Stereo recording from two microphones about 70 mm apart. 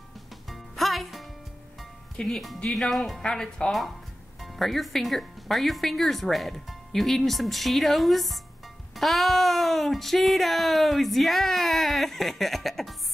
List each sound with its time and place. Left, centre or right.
0.5 s music: centre
2.1 s speech: centre